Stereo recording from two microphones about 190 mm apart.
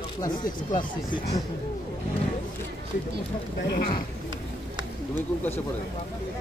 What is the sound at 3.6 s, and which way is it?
Speech, 45° left (ahead or behind).